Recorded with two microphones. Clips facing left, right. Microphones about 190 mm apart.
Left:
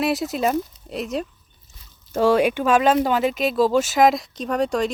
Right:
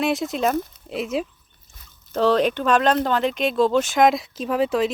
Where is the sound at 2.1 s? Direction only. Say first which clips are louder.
Left 1 dB; 10° left (ahead or behind).